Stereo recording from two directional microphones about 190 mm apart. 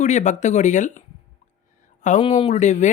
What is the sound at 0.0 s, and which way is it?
Speech, 40° left (ahead or behind).